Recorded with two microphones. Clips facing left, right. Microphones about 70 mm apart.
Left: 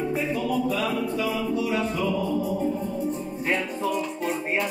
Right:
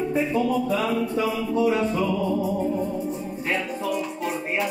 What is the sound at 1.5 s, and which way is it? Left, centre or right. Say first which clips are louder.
Music: right 4 dB; right.